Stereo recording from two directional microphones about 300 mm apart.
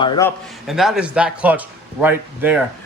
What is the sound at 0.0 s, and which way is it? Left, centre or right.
Speech, centre.